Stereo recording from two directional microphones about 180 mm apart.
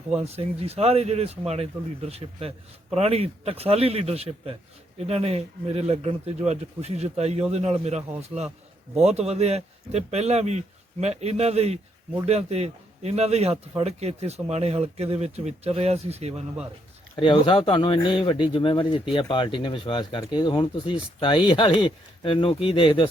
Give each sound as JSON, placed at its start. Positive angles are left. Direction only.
{"t": 0.2, "sound": "speech", "side_deg": -35}
{"t": 17.2, "sound": "speech", "side_deg": 25}